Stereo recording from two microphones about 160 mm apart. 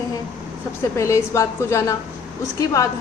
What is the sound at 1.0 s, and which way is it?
A woman's voice, 20° left (ahead or behind).